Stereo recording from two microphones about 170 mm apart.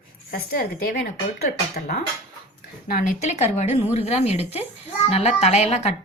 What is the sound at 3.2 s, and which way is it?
A woman's voice, 40° left (ahead or behind).